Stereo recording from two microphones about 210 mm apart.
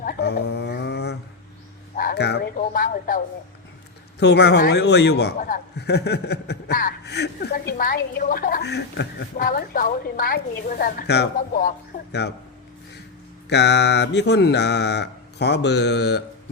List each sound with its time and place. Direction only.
0.0 s a sound: 45° left (ahead or behind)
2.0 s a man's voice: 45° left (ahead or behind)
4.2 s a man's voice: 55° left (ahead or behind)
13.5 s a man's voice: 55° left (ahead or behind)